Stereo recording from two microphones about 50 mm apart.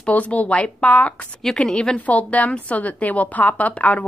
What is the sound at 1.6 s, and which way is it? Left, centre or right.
Speech, centre.